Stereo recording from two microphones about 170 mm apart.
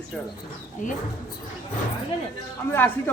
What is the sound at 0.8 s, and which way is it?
Speech, 50° left (ahead or behind).